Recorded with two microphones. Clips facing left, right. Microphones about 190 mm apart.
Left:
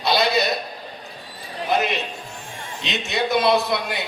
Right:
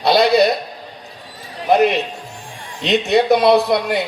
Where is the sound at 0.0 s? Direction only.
60° right (ahead or behind).